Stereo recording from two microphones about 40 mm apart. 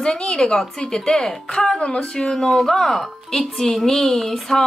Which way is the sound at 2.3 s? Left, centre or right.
Centre.